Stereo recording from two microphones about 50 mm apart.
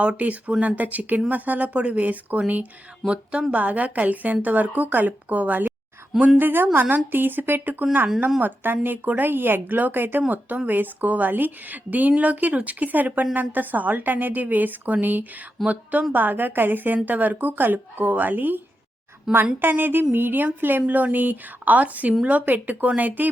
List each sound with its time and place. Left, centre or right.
0.0 s a woman's voice: right
3.0 s a sound: centre
3.5 s a woman's voice: right
19.3 s a woman's voice: centre
19.6 s a sound: right
20.1 s a woman's voice: right